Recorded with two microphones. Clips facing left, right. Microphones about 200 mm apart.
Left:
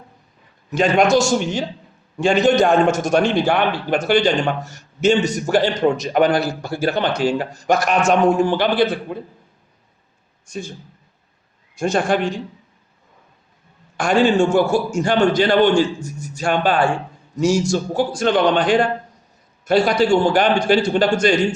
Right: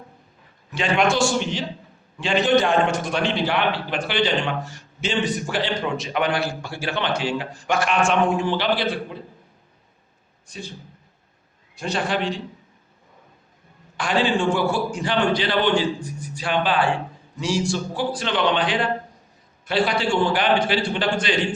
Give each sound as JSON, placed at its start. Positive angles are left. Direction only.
{"t": 0.7, "sound": "a man's voice", "side_deg": 40}
{"t": 10.4, "sound": "a man's voice", "side_deg": 45}
{"t": 11.7, "sound": "a man's voice", "side_deg": 45}
{"t": 13.9, "sound": "a man's voice", "side_deg": 45}